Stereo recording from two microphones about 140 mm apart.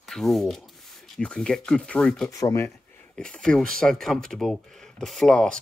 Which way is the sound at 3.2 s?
5° left (ahead or behind).